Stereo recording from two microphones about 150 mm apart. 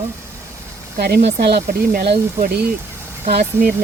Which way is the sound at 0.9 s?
90° right.